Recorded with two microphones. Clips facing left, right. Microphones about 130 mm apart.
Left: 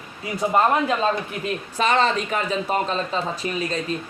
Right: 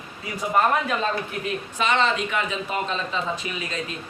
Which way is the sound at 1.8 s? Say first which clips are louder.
Left 2 dB; 40° left (ahead or behind).